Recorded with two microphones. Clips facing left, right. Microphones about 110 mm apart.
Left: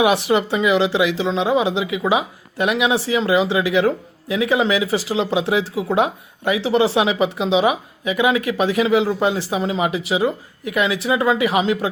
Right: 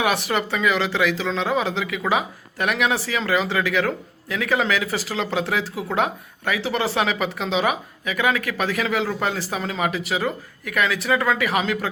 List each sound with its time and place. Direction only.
0.0 s speech: 25° left (ahead or behind)